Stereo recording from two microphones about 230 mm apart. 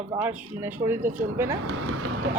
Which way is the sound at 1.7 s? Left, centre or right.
Right.